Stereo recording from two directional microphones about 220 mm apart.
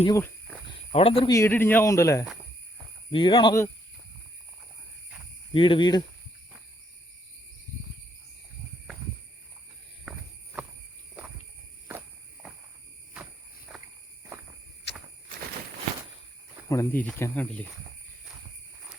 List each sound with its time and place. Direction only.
0.0 s speech: 15° left (ahead or behind)
0.7 s cricket: 25° left (ahead or behind)
1.3 s speech: 10° left (ahead or behind)
5.5 s speech: 25° left (ahead or behind)
10.1 s walk: centre (ahead or behind)
13.7 s walk: centre (ahead or behind)
16.6 s speech: 10° left (ahead or behind)